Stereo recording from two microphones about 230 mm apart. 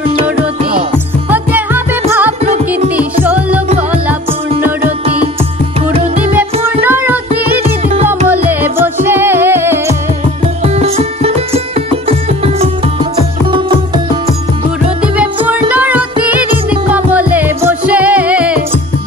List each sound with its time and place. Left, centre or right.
0.1 s music: right
0.9 s music: centre
6.8 s child singing: centre
8.3 s music: centre
10.6 s music: right
15.7 s music: centre